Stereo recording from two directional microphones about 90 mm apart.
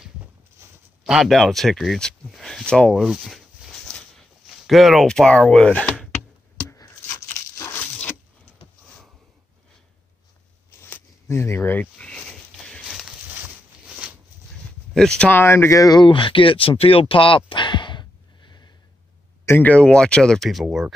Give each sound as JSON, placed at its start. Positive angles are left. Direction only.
{"t": 1.0, "sound": "speech", "side_deg": -5}
{"t": 3.0, "sound": "a sound", "side_deg": -10}
{"t": 4.5, "sound": "speech", "side_deg": 0}
{"t": 6.7, "sound": "a sound", "side_deg": 35}
{"t": 10.8, "sound": "a sound", "side_deg": 25}
{"t": 13.0, "sound": "a sound", "side_deg": -15}
{"t": 15.0, "sound": "speech", "side_deg": 10}
{"t": 15.3, "sound": "speech", "side_deg": 25}
{"t": 16.0, "sound": "speech", "side_deg": 65}
{"t": 17.5, "sound": "sneeze", "side_deg": 60}
{"t": 19.4, "sound": "speech", "side_deg": 20}
{"t": 20.6, "sound": "speech", "side_deg": -10}